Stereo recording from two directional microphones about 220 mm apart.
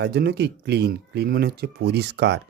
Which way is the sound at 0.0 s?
50° right (ahead or behind).